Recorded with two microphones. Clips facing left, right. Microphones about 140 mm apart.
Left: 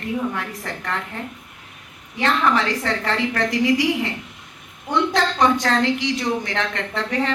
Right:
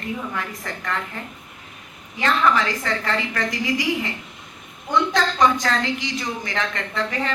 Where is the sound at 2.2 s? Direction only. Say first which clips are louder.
Even; 65° left (ahead or behind).